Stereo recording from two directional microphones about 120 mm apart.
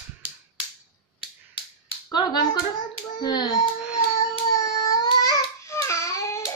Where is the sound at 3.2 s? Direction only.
35° left (ahead or behind).